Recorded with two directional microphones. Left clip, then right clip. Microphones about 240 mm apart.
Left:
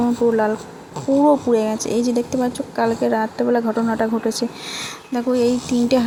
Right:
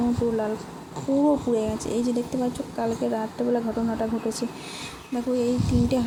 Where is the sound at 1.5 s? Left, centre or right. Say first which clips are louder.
Left 7 dB; centre.